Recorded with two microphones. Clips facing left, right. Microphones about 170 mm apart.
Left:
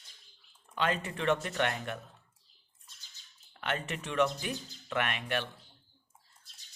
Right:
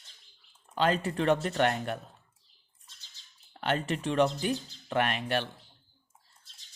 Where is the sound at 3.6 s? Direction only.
35° right (ahead or behind).